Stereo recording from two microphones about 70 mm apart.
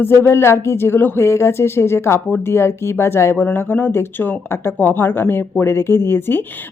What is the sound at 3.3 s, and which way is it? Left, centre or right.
Speech, left.